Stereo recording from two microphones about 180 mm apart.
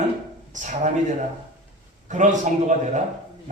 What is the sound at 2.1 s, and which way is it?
Speech, 45° right (ahead or behind).